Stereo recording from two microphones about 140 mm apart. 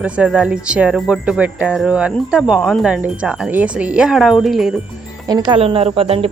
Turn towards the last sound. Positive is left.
turn(degrees=-45)  # may be behind; listen again after turning